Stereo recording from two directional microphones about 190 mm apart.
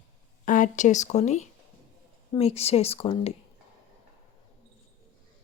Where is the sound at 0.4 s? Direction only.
45° left (ahead or behind).